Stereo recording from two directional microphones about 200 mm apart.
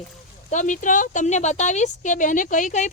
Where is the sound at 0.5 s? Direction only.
40° left (ahead or behind).